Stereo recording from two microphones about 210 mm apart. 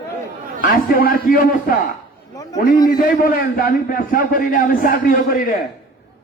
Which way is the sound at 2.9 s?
40° left (ahead or behind).